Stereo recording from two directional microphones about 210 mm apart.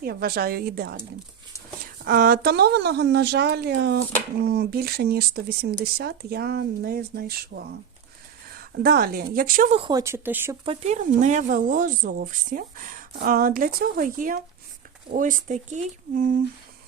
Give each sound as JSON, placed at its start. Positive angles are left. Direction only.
{"t": 0.0, "sound": "speech", "side_deg": -45}
{"t": 2.0, "sound": "a woman's voice", "side_deg": -45}
{"t": 9.7, "sound": "speech", "side_deg": -20}
{"t": 10.7, "sound": "speech", "side_deg": -35}